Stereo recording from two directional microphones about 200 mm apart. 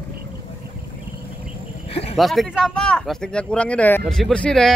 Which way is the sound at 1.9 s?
30° left (ahead or behind).